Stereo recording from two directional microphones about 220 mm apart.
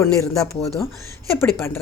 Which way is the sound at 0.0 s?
15° left (ahead or behind).